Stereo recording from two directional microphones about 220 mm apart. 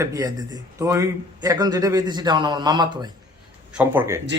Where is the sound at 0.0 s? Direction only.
15° right (ahead or behind).